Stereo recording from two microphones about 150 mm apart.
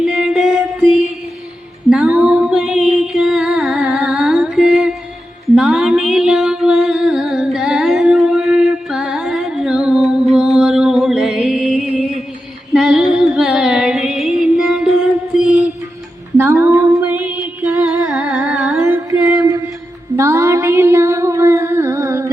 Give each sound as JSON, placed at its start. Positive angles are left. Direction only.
{"t": 0.0, "sound": "music", "side_deg": -5}
{"t": 15.4, "sound": "mantra", "side_deg": 0}
{"t": 16.4, "sound": "a sound", "side_deg": -15}
{"t": 17.0, "sound": "music", "side_deg": -10}